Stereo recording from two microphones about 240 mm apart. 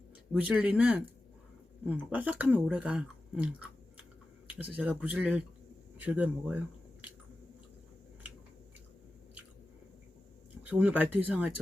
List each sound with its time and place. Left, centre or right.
0.4 s speech: centre
4.5 s speech: centre
10.7 s speech: centre